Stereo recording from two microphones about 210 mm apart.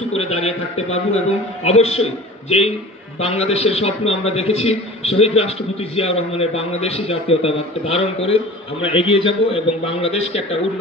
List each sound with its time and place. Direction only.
0.4 s a man's voice: 30° left (ahead or behind)
3.2 s a man's voice: 30° left (ahead or behind)